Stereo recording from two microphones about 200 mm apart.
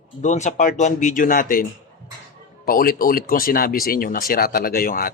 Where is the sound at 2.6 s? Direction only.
45° left (ahead or behind).